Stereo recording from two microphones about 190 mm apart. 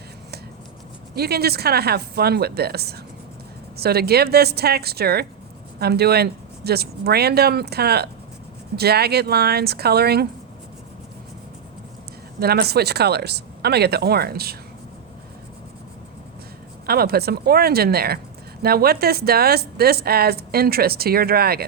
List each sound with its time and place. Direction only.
1.1 s speech: 55° right (ahead or behind)
12.4 s speech: 55° right (ahead or behind)
16.8 s speech: 55° right (ahead or behind)